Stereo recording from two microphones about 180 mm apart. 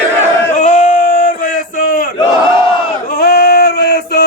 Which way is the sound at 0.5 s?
40° left (ahead or behind).